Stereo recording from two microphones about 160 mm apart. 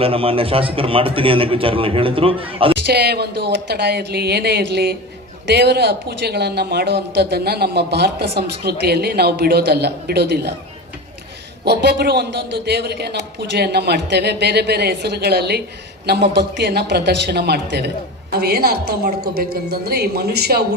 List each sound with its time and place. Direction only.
0.0 s a man's voice: 35° right (ahead or behind)
2.8 s speech: 90° right
11.6 s speech: 90° right
18.3 s a woman's voice: 75° right (ahead or behind)